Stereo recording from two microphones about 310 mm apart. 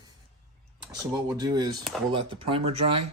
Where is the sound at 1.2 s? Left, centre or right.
Centre.